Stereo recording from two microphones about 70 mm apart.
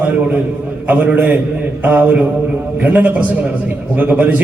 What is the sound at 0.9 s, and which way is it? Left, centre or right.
A man's voice, right.